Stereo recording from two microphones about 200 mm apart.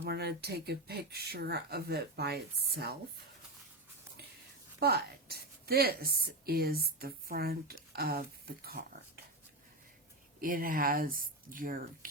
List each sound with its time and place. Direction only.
0.0 s speech: 55° right (ahead or behind)
4.8 s a woman's voice: 50° right (ahead or behind)
10.4 s speech: 45° right (ahead or behind)